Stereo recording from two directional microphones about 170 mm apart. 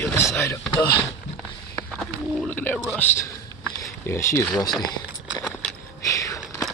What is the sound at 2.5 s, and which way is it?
Speech, 10° left (ahead or behind).